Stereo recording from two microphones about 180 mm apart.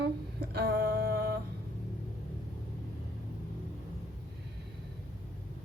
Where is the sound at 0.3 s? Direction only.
60° right (ahead or behind).